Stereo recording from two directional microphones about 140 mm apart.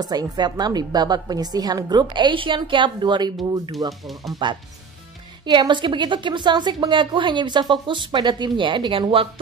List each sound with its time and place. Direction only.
0.0 s a woman's voice: 30° right (ahead or behind)
4.1 s speech: centre (ahead or behind)
5.4 s a woman's voice: 35° right (ahead or behind)